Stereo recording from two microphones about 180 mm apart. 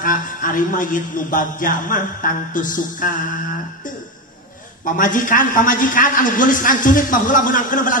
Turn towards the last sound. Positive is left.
turn(degrees=50)  # may be behind; listen again after turning